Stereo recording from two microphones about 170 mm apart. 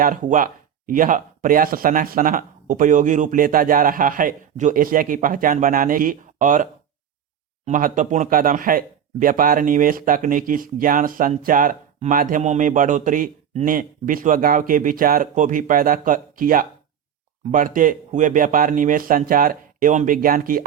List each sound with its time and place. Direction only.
0.0 s speech: 50° right (ahead or behind)